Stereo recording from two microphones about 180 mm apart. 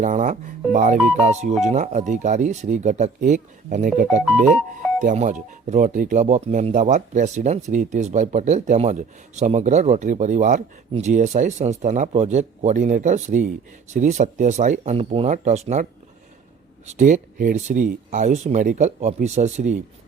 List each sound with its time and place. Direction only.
0.0 s speech: 45° right (ahead or behind)
0.9 s speech: 5° right (ahead or behind)
1.2 s speech: 40° right (ahead or behind)